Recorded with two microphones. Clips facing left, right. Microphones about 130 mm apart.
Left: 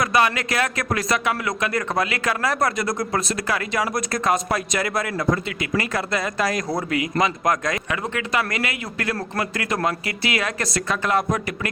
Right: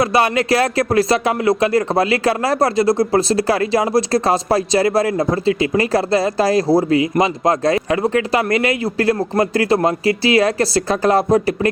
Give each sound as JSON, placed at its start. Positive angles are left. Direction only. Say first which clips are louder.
{"t": 0.0, "sound": "speech", "louder": "right 5 dB", "side_deg": -30}